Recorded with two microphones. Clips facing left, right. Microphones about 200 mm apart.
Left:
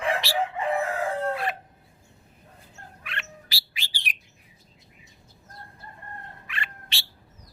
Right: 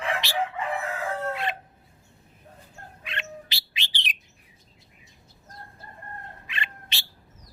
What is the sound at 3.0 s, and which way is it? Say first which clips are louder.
Bird: right 4 dB; 20° right (ahead or behind).